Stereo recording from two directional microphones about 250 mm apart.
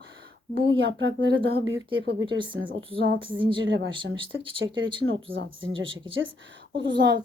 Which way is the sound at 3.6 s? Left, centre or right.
Right.